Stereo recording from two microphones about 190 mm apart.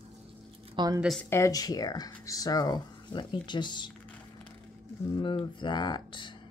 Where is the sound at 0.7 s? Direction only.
20° right (ahead or behind).